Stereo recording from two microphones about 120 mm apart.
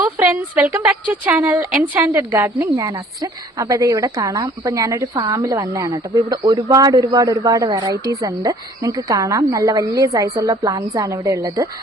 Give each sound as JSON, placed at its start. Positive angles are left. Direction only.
{"t": 0.0, "sound": "a woman's voice", "side_deg": -15}